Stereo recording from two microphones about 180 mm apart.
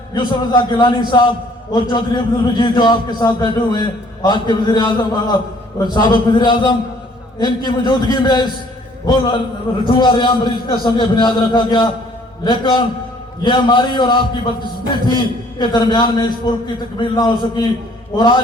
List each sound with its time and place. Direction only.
0.1 s a man's voice: 25° left (ahead or behind)